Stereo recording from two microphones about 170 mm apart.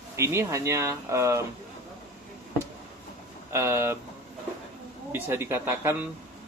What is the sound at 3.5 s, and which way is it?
Speech, 15° right (ahead or behind).